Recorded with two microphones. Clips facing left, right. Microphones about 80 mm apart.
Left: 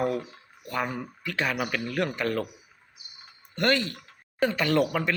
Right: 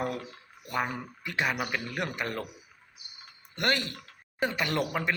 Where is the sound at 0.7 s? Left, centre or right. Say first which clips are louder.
Left 1 dB; centre.